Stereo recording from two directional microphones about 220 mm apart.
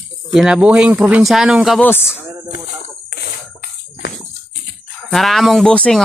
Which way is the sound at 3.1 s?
45° left (ahead or behind).